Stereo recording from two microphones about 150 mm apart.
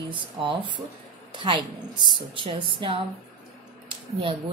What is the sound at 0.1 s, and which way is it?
A woman's voice, 35° right (ahead or behind).